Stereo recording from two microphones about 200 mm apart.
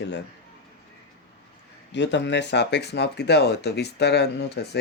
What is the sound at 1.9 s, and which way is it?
Speech, 60° left (ahead or behind).